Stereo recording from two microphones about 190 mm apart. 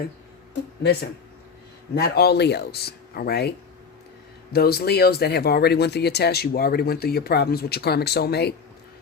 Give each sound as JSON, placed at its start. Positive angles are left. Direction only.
{"t": 2.0, "sound": "speech", "side_deg": 55}
{"t": 4.5, "sound": "speech", "side_deg": 55}